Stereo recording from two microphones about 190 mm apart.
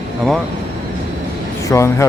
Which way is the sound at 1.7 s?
15° left (ahead or behind).